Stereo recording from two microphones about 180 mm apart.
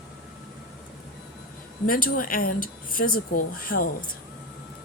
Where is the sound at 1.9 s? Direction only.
50° left (ahead or behind).